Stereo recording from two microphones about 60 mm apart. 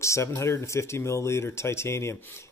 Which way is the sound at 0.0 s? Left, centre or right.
Left.